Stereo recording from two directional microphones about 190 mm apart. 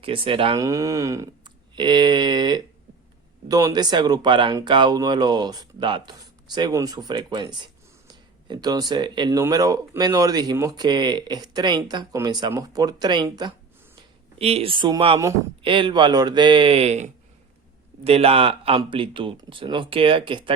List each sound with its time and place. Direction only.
0.0 s speech: 30° right (ahead or behind)
0.6 s a sound: 15° right (ahead or behind)
3.5 s speech: 20° right (ahead or behind)